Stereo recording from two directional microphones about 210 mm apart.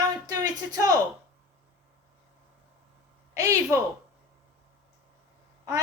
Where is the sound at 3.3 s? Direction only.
15° right (ahead or behind).